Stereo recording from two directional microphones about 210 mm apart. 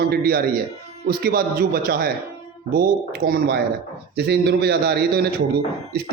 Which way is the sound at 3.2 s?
50° right (ahead or behind).